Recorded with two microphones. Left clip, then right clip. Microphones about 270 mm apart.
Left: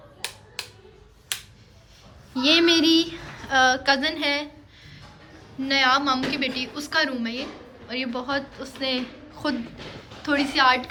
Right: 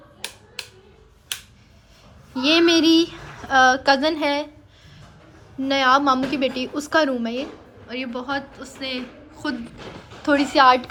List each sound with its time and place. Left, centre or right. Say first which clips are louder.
0.2 s typewriter: even; left
2.3 s a woman's voice: right 2 dB; centre
5.6 s a woman's voice: right 3 dB; centre